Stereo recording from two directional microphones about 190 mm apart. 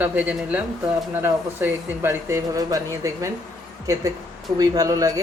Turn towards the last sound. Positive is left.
turn(degrees=-20)  # may be behind; listen again after turning